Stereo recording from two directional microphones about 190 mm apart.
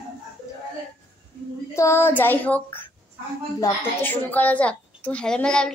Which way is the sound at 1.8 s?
15° left (ahead or behind).